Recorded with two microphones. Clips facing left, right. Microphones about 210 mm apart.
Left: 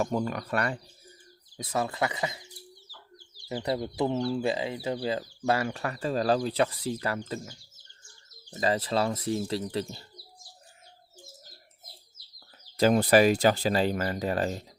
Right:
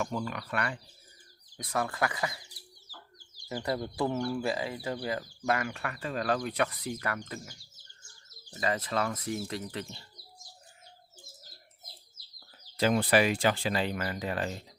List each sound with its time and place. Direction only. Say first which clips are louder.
0.0 s speech: left 5 dB; 40° left (ahead or behind)
1.5 s speech: left 2 dB; 25° left (ahead or behind)
3.5 s speech: left 3 dB; 20° left (ahead or behind)
8.6 s speech: left 4 dB; 30° left (ahead or behind)
12.7 s speech: left 5 dB; 40° left (ahead or behind)